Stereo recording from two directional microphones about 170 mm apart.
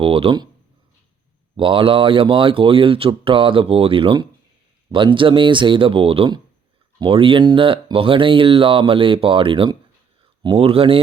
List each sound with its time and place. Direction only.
0.0 s speech: 35° right (ahead or behind)
1.5 s speech: 30° right (ahead or behind)